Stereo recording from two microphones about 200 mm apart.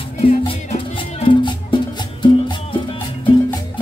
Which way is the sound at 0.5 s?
30° left (ahead or behind).